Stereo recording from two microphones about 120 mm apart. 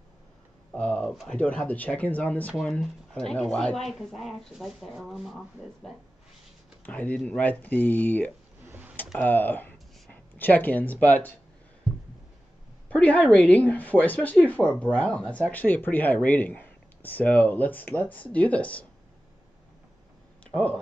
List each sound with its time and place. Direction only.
0.7 s speech: 10° left (ahead or behind)
6.9 s speech: 10° left (ahead or behind)
12.8 s speech: 10° left (ahead or behind)
20.5 s speech: 5° left (ahead or behind)